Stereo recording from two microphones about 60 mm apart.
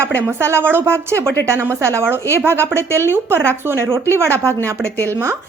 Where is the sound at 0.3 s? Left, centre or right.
Right.